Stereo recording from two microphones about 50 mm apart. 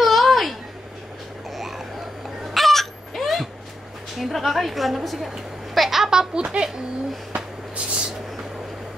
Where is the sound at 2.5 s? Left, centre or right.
Centre.